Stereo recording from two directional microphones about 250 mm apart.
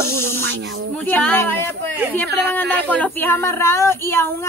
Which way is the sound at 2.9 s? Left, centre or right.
Centre.